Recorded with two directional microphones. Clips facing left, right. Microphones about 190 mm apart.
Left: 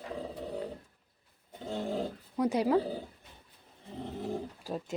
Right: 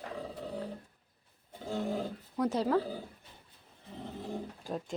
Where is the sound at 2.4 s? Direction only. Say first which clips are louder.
Left 2 dB; 10° left (ahead or behind).